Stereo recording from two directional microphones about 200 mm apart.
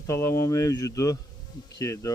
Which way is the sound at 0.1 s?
15° left (ahead or behind).